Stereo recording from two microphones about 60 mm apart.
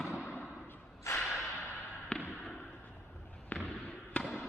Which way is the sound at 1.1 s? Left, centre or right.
Left.